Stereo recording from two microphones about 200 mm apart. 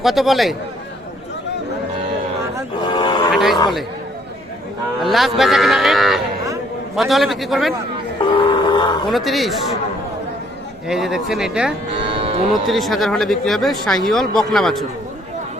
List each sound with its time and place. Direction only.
0.0 s a man's voice: centre (ahead or behind)
2.8 s music: 25° left (ahead or behind)
3.3 s a man's voice: centre (ahead or behind)
4.9 s a man's voice: centre (ahead or behind)
8.4 s grunt: 25° left (ahead or behind)
9.0 s a man's voice: centre (ahead or behind)
10.8 s a man's voice: centre (ahead or behind)
12.0 s music: 25° right (ahead or behind)
12.6 s a man's voice: centre (ahead or behind)